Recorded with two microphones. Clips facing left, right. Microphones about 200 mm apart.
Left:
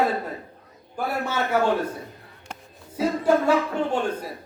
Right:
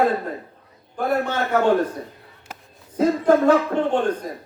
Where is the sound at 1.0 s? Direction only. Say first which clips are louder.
Right 4 dB; 10° left (ahead or behind).